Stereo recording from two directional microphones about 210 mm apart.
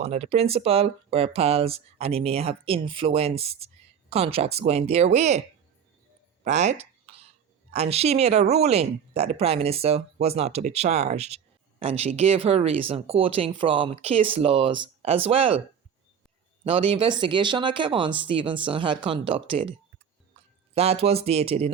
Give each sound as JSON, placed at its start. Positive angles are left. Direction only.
{"t": 0.0, "sound": "speech", "side_deg": -30}
{"t": 6.4, "sound": "a sound", "side_deg": -35}
{"t": 7.7, "sound": "speech", "side_deg": -30}
{"t": 16.6, "sound": "speech", "side_deg": -25}
{"t": 20.7, "sound": "speech", "side_deg": -30}